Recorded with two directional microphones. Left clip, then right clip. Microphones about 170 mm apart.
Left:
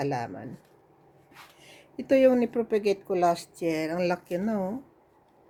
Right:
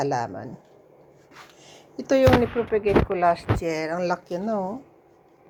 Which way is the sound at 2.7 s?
25° left (ahead or behind).